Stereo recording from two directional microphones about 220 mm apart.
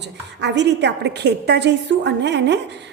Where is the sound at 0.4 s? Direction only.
50° right (ahead or behind).